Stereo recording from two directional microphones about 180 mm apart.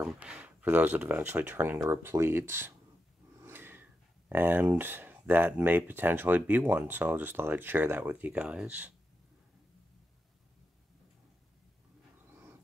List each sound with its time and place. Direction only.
0.0 s speech: 5° right (ahead or behind)
3.4 s snort: 10° right (ahead or behind)
4.3 s speech: 10° right (ahead or behind)